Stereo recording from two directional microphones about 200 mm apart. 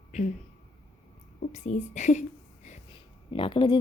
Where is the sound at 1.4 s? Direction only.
35° left (ahead or behind).